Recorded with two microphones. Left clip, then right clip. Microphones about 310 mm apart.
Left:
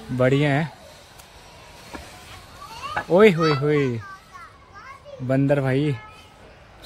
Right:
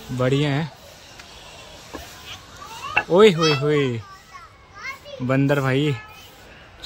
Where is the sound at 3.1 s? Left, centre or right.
Centre.